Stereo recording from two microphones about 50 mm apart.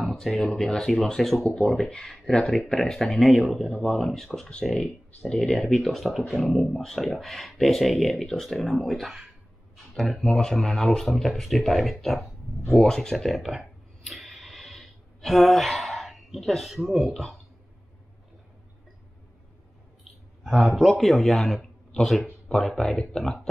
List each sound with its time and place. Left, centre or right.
0.0 s a sound: centre
0.6 s speech: centre
13.6 s a sound: centre
20.4 s speech: centre
21.3 s speech: centre
22.6 s speech: centre